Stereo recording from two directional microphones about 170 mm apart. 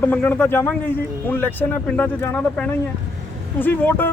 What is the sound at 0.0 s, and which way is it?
Speech, 10° left (ahead or behind).